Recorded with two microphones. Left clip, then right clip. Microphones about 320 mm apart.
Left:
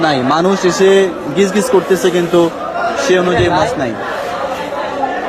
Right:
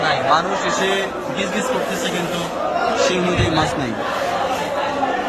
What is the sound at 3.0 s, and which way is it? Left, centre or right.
Speech, centre.